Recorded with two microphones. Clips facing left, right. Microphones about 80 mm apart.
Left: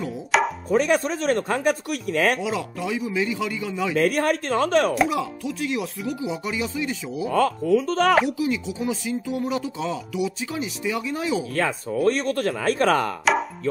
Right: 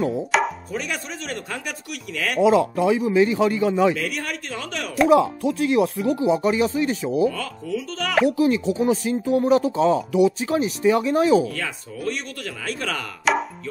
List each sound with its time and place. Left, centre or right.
0.3 s chopping: centre
0.7 s speech: left
2.4 s a man's voice: right
3.9 s speech: left
5.1 s a man's voice: right
7.2 s speech: left
8.4 s speech: right
11.5 s speech: left
13.2 s chopping: centre